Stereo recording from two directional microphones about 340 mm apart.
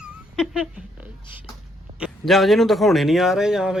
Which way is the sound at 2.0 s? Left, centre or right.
Centre.